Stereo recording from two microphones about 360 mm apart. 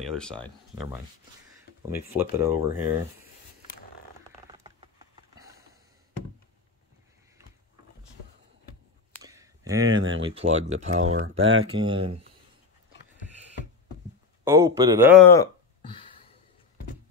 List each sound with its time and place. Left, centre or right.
0.0 s speech: centre
4.5 s a sound: centre
9.2 s a sound: centre
9.9 s speech: right
10.2 s speech: centre
11.1 s speech: right
11.7 s speech: centre
14.4 s speech: centre
15.3 s a sound: centre